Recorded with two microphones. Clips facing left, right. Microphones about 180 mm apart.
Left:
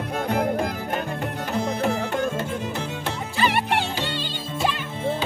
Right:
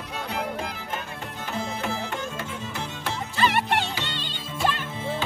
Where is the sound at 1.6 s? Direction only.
60° left (ahead or behind).